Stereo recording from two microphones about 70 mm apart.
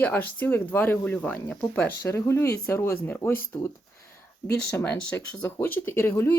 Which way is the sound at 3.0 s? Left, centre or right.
Left.